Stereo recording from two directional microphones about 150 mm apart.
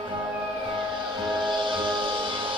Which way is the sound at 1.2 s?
30° right (ahead or behind).